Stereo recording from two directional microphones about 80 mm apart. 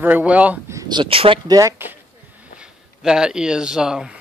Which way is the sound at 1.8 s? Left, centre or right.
Right.